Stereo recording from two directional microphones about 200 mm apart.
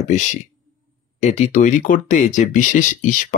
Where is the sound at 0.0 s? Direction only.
35° left (ahead or behind).